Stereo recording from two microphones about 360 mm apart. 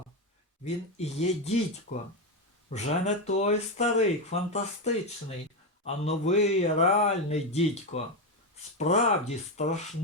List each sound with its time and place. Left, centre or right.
0.6 s speech: centre